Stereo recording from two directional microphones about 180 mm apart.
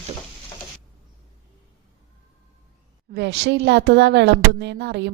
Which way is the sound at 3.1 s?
75° right (ahead or behind).